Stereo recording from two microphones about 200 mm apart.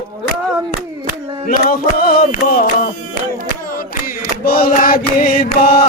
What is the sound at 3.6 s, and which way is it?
Chant, 45° left (ahead or behind).